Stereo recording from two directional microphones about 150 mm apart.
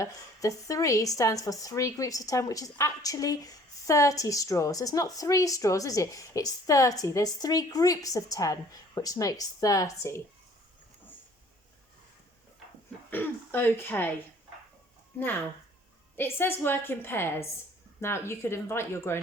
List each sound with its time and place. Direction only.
0.0 s a woman's voice: 20° left (ahead or behind)
13.1 s a woman's voice: 15° left (ahead or behind)
16.1 s a woman's voice: 15° left (ahead or behind)